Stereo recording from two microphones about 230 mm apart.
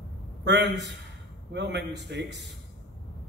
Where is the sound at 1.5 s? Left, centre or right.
Right.